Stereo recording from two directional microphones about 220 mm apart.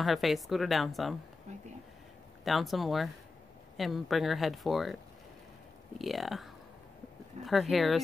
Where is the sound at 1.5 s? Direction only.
30° right (ahead or behind).